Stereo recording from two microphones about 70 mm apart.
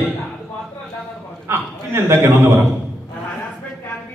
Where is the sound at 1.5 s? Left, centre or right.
Right.